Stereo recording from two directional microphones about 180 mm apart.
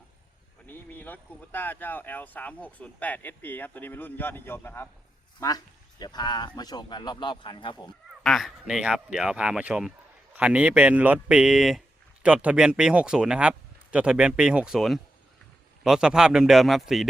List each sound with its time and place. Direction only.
0.7 s speech: 10° left (ahead or behind); by 7.8 s 25° left (ahead or behind)
8.2 s a man's voice: centre (ahead or behind)